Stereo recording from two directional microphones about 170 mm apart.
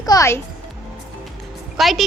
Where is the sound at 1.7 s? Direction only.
Centre (ahead or behind).